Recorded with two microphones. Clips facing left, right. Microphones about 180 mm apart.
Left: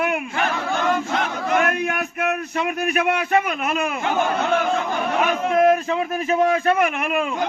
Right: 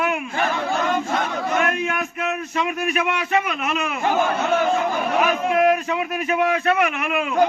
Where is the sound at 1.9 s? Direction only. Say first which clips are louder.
Left 2 dB; 55° left (ahead or behind).